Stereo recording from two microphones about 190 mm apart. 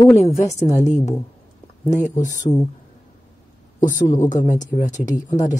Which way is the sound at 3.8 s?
40° left (ahead or behind).